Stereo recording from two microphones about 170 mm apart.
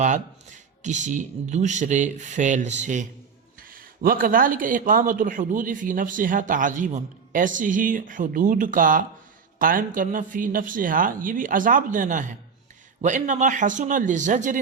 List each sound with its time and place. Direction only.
0.0 s a man's voice: 45° right (ahead or behind)
3.6 s a man's voice: 55° right (ahead or behind)